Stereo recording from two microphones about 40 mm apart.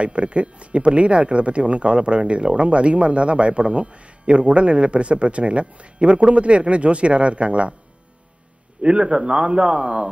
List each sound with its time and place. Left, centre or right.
0.0 s speech: right
8.8 s a man's voice: right